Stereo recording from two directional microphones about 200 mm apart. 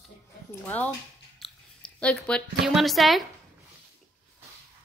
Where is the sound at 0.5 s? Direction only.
10° left (ahead or behind).